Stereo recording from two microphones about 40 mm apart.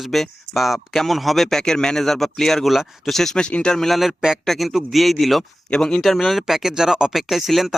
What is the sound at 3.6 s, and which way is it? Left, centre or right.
Speech, centre.